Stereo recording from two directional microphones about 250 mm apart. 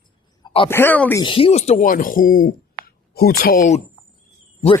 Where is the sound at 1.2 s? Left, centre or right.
Left.